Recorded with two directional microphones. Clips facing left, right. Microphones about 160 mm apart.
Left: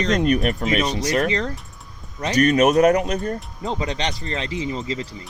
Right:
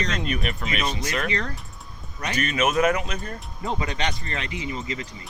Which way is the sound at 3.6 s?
25° left (ahead or behind).